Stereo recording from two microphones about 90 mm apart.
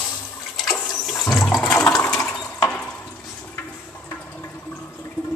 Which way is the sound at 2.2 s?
10° left (ahead or behind).